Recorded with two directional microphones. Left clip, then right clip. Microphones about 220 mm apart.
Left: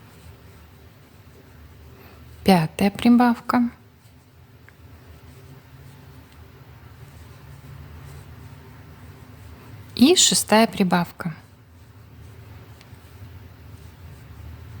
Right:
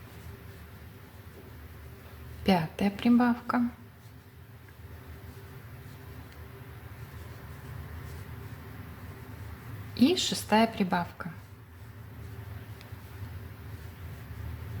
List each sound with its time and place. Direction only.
2.4 s a woman's voice: 40° left (ahead or behind)
9.9 s a woman's voice: 40° left (ahead or behind)